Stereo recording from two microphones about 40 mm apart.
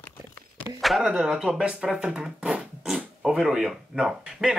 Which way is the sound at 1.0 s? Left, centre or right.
Centre.